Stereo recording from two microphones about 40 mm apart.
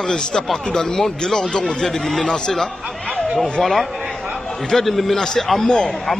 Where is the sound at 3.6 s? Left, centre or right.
Centre.